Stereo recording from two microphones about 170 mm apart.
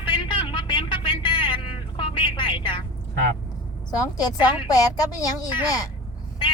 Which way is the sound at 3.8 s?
25° left (ahead or behind).